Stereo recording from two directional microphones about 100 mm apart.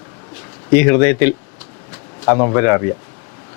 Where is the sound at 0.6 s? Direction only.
25° left (ahead or behind).